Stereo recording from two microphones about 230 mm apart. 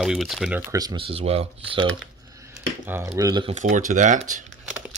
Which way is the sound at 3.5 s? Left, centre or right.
Right.